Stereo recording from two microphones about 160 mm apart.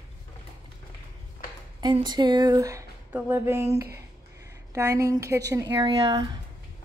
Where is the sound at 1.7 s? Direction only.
25° right (ahead or behind).